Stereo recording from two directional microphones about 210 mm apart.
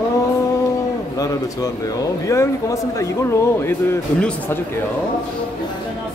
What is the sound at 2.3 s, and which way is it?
A woman's voice, 15° left (ahead or behind).